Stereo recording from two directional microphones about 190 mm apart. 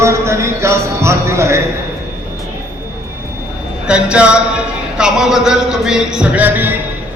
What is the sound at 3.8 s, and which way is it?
A man's voice, 5° right (ahead or behind).